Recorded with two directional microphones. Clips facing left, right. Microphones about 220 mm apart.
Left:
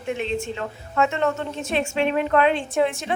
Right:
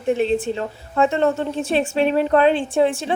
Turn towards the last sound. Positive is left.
turn(degrees=-30)  # may be behind; listen again after turning